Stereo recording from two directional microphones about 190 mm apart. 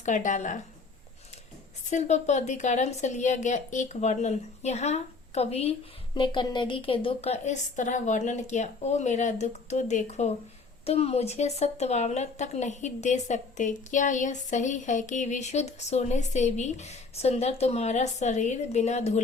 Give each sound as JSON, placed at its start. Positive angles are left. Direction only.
{"t": 0.0, "sound": "speech", "side_deg": 40}
{"t": 1.9, "sound": "speech", "side_deg": 40}